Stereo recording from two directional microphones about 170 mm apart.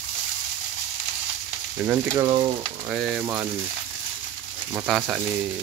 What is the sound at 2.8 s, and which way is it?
Frying, 5° right (ahead or behind).